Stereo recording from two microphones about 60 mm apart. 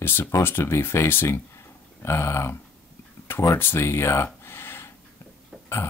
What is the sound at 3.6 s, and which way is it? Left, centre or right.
Speech, left.